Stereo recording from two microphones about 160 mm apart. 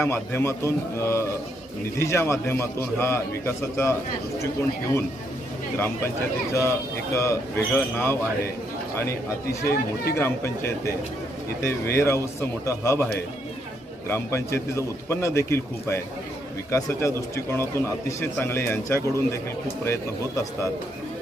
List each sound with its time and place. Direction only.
0.0 s speech: 15° left (ahead or behind)
5.7 s speech: 15° left (ahead or behind)
14.1 s speech: 15° left (ahead or behind)